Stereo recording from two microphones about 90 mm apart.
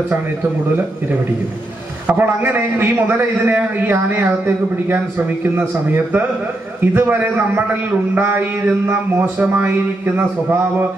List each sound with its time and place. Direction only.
2.0 s a man's voice: 20° right (ahead or behind)
6.8 s a man's voice: 20° right (ahead or behind)